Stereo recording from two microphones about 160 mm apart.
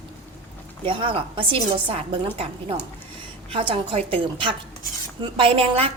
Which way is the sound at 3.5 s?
35° right (ahead or behind).